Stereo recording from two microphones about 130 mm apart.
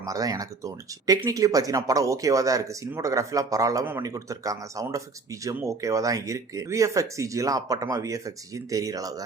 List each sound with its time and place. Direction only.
0.0 s speech: 25° right (ahead or behind)